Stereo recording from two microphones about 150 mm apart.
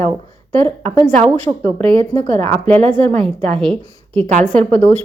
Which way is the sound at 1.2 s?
40° right (ahead or behind).